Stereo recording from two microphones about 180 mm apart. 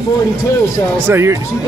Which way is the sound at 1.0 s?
15° right (ahead or behind).